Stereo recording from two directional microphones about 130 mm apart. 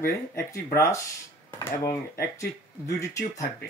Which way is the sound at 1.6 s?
25° left (ahead or behind).